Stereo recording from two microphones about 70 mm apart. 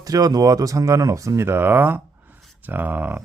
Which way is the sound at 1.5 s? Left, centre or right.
Right.